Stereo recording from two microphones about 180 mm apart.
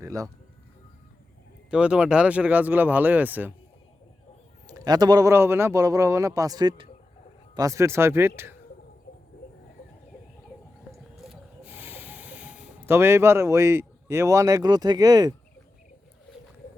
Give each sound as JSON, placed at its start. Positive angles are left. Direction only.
{"t": 0.0, "sound": "a man's voice", "side_deg": -20}
{"t": 1.7, "sound": "speech", "side_deg": -5}
{"t": 4.6, "sound": "a man's voice", "side_deg": -20}
{"t": 11.3, "sound": "snake", "side_deg": -10}